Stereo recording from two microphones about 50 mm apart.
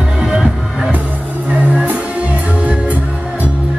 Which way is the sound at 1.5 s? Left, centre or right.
Right.